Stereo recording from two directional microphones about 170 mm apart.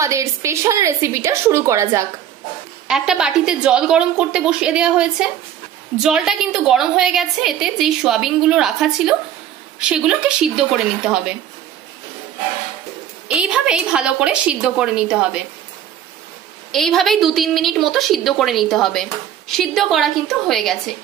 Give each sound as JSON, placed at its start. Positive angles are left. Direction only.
{"t": 0.0, "sound": "a woman's voice", "side_deg": -20}
{"t": 2.9, "sound": "a woman's voice", "side_deg": -5}
{"t": 13.3, "sound": "a woman's voice", "side_deg": -5}
{"t": 16.7, "sound": "a woman's voice", "side_deg": 0}